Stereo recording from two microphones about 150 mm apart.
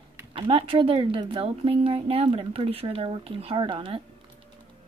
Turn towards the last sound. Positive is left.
turn(degrees=-35)  # may be behind; listen again after turning